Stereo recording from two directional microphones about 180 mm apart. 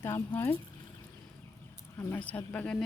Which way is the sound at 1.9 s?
10° left (ahead or behind).